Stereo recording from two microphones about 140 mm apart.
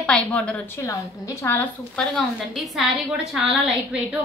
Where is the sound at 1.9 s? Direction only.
Centre (ahead or behind).